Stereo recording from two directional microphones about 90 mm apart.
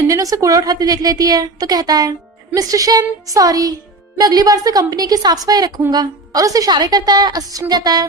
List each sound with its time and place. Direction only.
0.1 s a woman's voice: 40° right (ahead or behind)